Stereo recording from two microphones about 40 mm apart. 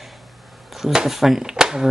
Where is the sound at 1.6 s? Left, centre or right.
Centre.